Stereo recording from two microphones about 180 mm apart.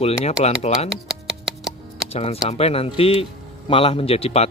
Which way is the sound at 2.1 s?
35° left (ahead or behind).